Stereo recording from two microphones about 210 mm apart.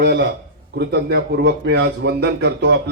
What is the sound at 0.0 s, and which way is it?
Speech, 55° right (ahead or behind).